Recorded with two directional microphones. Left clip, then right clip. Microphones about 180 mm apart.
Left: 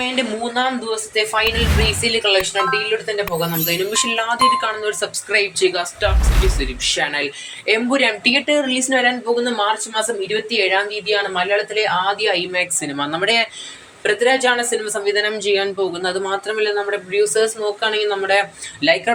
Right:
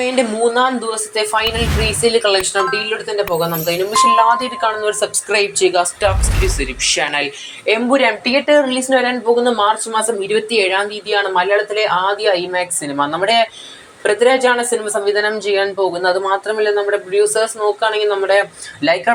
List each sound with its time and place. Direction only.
0.0 s a woman's voice: 20° right (ahead or behind)
3.2 s speech: 5° right (ahead or behind)